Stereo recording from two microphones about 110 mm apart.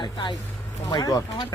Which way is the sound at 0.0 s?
45° left (ahead or behind).